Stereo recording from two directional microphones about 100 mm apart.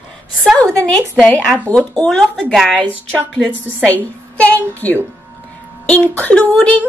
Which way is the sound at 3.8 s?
15° left (ahead or behind).